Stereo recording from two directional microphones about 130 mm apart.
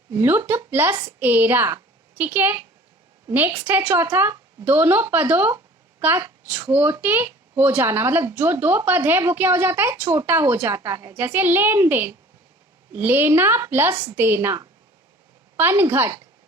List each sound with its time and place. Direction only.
0.1 s a woman's voice: 20° right (ahead or behind)
11.1 s speech: 15° right (ahead or behind)